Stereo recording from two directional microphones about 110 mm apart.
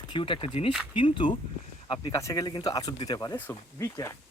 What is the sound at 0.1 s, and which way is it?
Speech, 50° left (ahead or behind).